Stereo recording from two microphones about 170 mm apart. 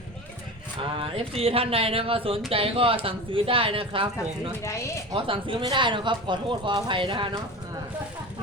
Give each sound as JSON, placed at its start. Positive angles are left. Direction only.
{"t": 0.8, "sound": "speech", "side_deg": -35}
{"t": 4.6, "sound": "speech", "side_deg": 15}
{"t": 5.1, "sound": "speech", "side_deg": -30}